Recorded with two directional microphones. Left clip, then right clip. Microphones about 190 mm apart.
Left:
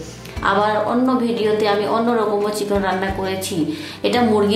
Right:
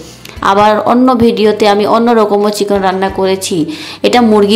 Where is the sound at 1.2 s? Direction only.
40° right (ahead or behind).